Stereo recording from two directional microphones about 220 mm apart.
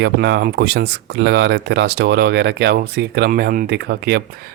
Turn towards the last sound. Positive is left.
turn(degrees=-45)  # may be behind; listen again after turning